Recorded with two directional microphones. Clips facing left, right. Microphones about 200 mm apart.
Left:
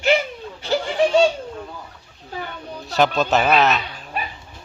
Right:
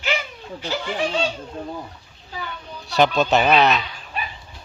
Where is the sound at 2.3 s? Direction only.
40° left (ahead or behind).